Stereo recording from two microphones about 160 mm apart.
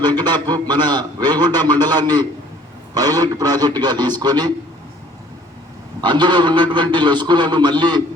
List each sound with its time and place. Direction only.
0.0 s a man's voice: 25° right (ahead or behind)
6.0 s a man's voice: 30° right (ahead or behind)